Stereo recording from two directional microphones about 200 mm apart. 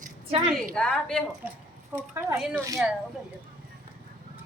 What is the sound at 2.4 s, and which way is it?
Speech, 5° right (ahead or behind).